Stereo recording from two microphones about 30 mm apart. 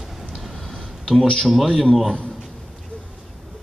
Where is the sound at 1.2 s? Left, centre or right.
Left.